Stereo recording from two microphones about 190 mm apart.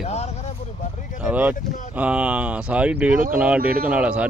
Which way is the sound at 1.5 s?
40° left (ahead or behind).